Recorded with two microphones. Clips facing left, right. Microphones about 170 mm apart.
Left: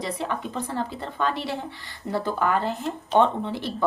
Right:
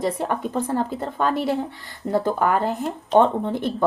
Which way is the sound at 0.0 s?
45° right (ahead or behind).